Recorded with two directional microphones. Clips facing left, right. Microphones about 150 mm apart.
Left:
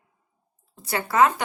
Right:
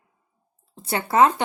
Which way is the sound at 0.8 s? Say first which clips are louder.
Right 2 dB; 25° right (ahead or behind).